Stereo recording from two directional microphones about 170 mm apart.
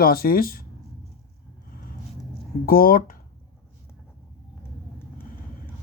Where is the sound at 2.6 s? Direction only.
60° left (ahead or behind).